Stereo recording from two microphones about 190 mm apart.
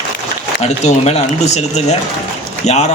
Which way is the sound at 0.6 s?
35° left (ahead or behind).